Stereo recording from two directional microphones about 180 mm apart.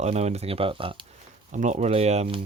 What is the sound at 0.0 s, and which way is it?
Speech, 35° right (ahead or behind).